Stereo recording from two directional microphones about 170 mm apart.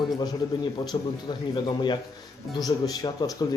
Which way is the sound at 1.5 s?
25° left (ahead or behind).